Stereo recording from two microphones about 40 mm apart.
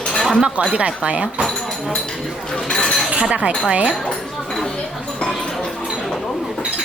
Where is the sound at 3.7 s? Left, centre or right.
Right.